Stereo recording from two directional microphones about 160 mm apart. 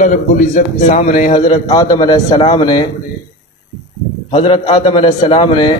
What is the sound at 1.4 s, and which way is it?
A man's voice, 25° left (ahead or behind).